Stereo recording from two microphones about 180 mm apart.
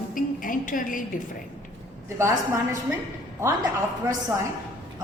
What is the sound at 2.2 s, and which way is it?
Speech, 15° right (ahead or behind).